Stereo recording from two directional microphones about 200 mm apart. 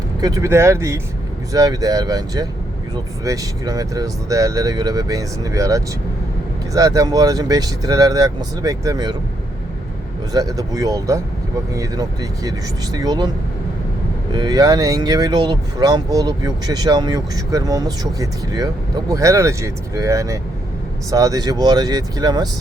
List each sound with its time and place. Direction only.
0.2 s speech: 20° right (ahead or behind)
10.3 s speech: 20° right (ahead or behind)
14.3 s speech: 20° right (ahead or behind)